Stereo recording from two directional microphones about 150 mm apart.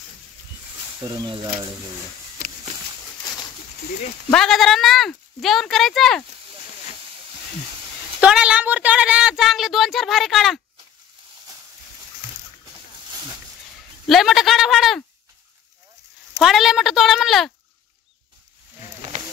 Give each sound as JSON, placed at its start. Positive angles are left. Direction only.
{"t": 1.1, "sound": "speech", "side_deg": -30}
{"t": 2.4, "sound": "a sound", "side_deg": -70}
{"t": 4.3, "sound": "speech", "side_deg": 5}
{"t": 8.2, "sound": "a sound", "side_deg": -5}
{"t": 14.0, "sound": "speech", "side_deg": 0}
{"t": 16.3, "sound": "speech", "side_deg": 0}